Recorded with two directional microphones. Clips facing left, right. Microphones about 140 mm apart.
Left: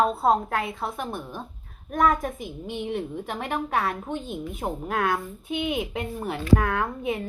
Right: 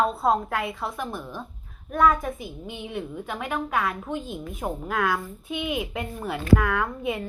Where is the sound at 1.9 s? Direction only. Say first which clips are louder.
Right 1 dB; 35° left (ahead or behind).